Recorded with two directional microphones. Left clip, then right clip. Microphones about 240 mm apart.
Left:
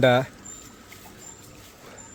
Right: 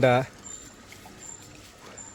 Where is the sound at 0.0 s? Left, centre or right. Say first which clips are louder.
Left 2 dB; centre.